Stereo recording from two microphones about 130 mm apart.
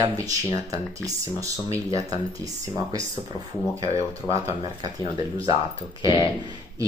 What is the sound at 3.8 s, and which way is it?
Speech, 50° left (ahead or behind).